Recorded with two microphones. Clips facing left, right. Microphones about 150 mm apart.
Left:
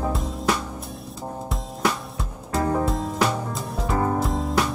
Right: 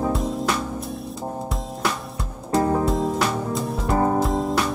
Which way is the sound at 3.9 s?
25° right (ahead or behind).